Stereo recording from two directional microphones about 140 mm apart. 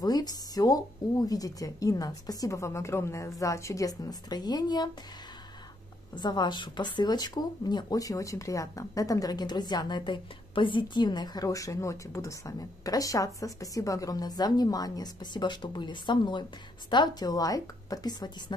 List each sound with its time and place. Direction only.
0.0 s speech: 30° left (ahead or behind)
6.1 s speech: 30° left (ahead or behind)